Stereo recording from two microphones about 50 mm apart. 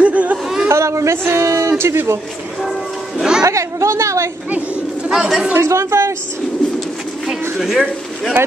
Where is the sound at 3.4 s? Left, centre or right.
Right.